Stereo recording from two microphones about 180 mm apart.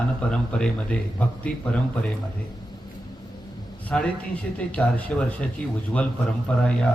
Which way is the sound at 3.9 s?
5° left (ahead or behind).